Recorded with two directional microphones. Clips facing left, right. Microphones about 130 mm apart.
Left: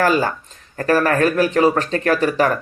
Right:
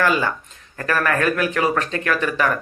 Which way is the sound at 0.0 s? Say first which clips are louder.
Left 3 dB; 40° left (ahead or behind).